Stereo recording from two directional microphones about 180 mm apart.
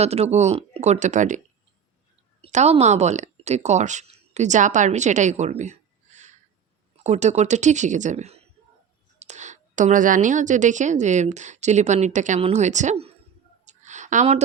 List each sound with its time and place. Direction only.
0.0 s a woman's voice: 35° right (ahead or behind)
2.4 s a woman's voice: 40° right (ahead or behind)
7.0 s a woman's voice: 40° right (ahead or behind)
13.7 s a sound: 40° right (ahead or behind)